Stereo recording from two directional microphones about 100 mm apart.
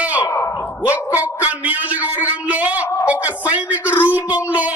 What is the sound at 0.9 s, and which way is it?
A man's voice, 15° right (ahead or behind).